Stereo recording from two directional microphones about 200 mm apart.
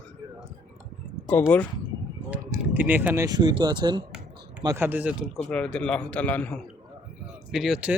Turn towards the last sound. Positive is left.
turn(degrees=0)  # may be behind; listen again after turning